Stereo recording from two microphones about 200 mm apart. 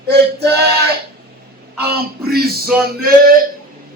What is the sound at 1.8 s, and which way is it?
A man's voice, 50° right (ahead or behind).